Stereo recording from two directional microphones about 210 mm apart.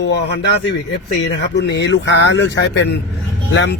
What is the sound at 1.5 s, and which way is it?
Speech, 55° left (ahead or behind).